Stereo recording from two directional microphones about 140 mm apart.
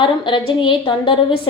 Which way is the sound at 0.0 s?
35° left (ahead or behind).